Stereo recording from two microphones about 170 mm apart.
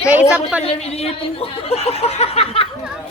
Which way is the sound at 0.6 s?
40° left (ahead or behind).